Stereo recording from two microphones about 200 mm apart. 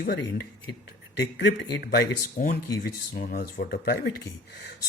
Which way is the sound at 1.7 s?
55° left (ahead or behind).